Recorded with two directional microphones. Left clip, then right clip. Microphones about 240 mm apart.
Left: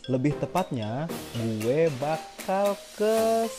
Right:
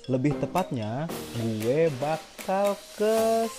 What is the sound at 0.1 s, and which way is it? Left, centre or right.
Speech, centre.